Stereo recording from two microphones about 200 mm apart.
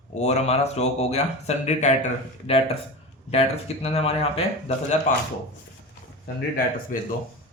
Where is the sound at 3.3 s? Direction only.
30° left (ahead or behind).